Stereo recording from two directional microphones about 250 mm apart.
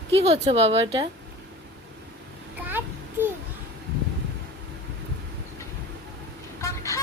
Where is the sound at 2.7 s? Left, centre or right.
Centre.